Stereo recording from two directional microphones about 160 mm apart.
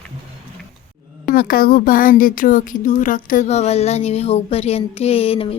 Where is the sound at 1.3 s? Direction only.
65° left (ahead or behind).